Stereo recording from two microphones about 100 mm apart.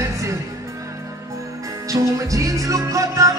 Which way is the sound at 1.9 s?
35° right (ahead or behind).